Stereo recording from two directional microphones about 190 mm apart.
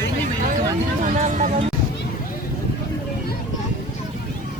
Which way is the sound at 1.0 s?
40° right (ahead or behind).